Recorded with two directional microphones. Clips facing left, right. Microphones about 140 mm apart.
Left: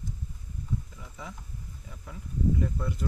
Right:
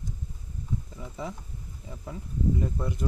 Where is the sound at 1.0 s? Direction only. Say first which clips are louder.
Right 7 dB; 30° right (ahead or behind).